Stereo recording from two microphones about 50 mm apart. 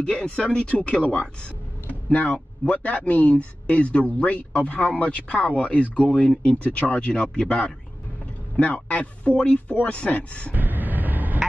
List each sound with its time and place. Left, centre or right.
0.0 s speech: centre
2.1 s speech: left
10.5 s vehicle: right